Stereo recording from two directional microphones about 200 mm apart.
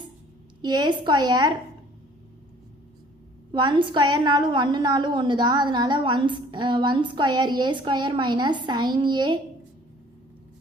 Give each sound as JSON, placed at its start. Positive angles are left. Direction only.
{"t": 0.6, "sound": "a woman's voice", "side_deg": -20}
{"t": 3.5, "sound": "a woman's voice", "side_deg": -25}